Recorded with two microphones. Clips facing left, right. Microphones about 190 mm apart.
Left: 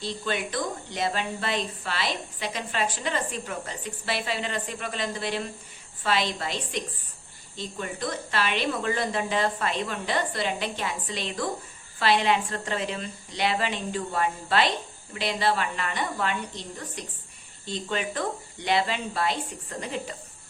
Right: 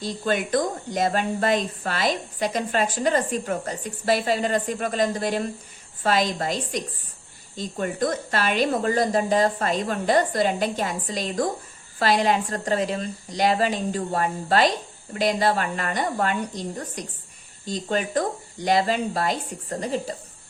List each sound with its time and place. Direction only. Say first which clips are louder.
0.0 s a woman's voice: right 5 dB; 45° right (ahead or behind)